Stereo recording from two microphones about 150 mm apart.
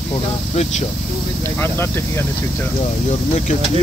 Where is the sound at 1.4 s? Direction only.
15° left (ahead or behind).